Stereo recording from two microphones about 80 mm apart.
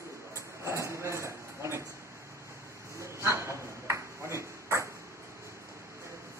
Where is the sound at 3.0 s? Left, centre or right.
Right.